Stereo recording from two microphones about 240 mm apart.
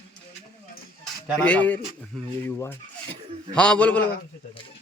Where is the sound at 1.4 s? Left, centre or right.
Centre.